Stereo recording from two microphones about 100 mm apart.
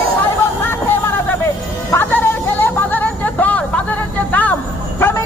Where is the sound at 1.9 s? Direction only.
20° left (ahead or behind).